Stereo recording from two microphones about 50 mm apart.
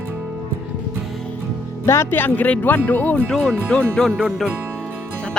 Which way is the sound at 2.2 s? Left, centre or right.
Left.